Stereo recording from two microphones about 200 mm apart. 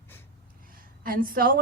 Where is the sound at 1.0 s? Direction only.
45° right (ahead or behind).